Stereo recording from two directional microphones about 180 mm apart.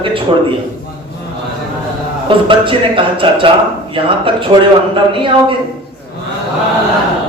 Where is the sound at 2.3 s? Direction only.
30° right (ahead or behind).